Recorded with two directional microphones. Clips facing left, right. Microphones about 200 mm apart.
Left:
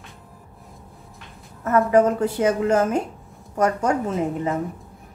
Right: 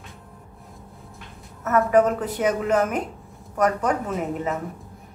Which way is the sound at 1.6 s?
30° left (ahead or behind).